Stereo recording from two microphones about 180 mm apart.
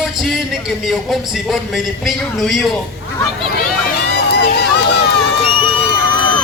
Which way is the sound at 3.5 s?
55° left (ahead or behind).